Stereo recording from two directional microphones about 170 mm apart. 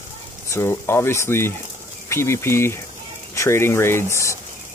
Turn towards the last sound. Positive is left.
turn(degrees=15)  # may be behind; listen again after turning